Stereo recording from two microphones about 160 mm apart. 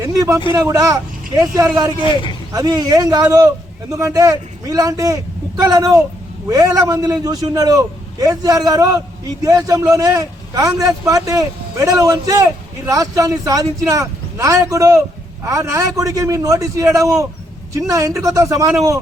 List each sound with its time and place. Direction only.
0.0 s speech: 20° right (ahead or behind)